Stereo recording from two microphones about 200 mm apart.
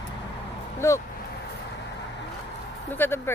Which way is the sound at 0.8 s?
15° left (ahead or behind).